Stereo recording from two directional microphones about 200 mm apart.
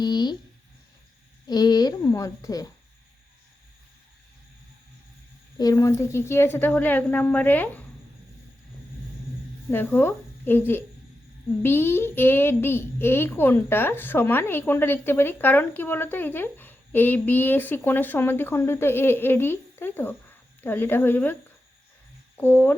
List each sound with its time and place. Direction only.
0.0 s a sound: 20° left (ahead or behind)
1.5 s a child's voice: 20° left (ahead or behind)
5.5 s a child's voice: 15° left (ahead or behind)
9.7 s a child's voice: 10° left (ahead or behind)
22.4 s a child's voice: 10° left (ahead or behind)